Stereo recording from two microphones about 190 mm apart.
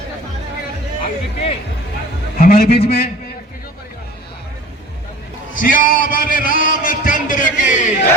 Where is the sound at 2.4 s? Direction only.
50° left (ahead or behind).